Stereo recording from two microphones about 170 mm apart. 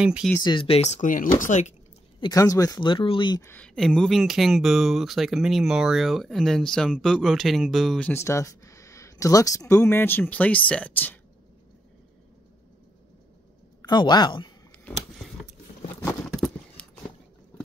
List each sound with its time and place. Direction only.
0.0 s speech: 5° right (ahead or behind)
0.4 s speech: 30° left (ahead or behind); by 1.7 s 45° left (ahead or behind)
2.1 s speech: 20° left (ahead or behind)
3.4 s speech: 5° left (ahead or behind)
8.1 s speech: 15° left (ahead or behind)
13.8 s speech: 25° left (ahead or behind)
16.3 s a sound: centre (ahead or behind)